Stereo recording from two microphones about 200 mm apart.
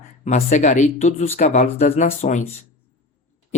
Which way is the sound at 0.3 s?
35° left (ahead or behind).